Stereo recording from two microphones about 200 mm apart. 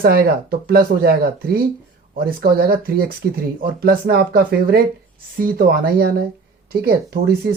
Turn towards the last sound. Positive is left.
turn(degrees=-50)  # may be behind; listen again after turning